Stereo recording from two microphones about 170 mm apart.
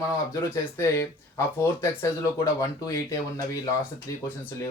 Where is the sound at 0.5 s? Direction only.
15° left (ahead or behind).